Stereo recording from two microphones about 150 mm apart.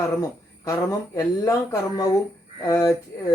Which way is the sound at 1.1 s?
20° left (ahead or behind).